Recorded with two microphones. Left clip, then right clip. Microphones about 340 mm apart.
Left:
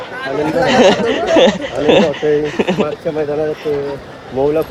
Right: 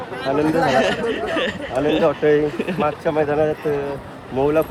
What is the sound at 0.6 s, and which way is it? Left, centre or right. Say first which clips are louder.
Speech: left 7 dB; centre.